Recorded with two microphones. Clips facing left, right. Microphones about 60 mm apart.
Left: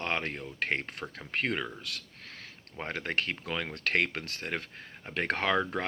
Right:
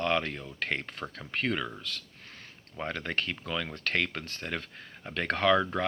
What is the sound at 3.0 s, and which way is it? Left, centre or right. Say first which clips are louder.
Speech: left 1 dB; left.